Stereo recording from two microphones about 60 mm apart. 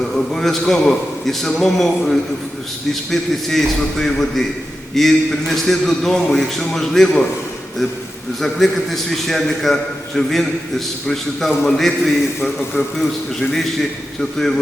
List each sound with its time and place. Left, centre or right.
0.3 s a man's voice: centre
8.4 s a man's voice: centre
14.2 s a man's voice: centre